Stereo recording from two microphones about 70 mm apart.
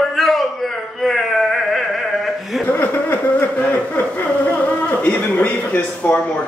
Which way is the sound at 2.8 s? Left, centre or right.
Left.